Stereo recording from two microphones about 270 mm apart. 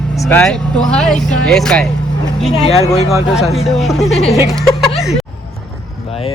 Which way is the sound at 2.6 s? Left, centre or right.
Left.